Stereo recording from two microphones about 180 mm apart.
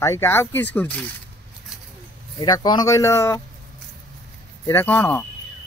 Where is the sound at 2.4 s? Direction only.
20° left (ahead or behind).